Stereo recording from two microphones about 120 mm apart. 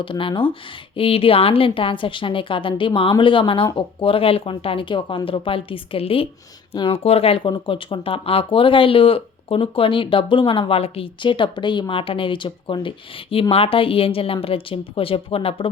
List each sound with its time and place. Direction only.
0.0 s speech: 45° left (ahead or behind)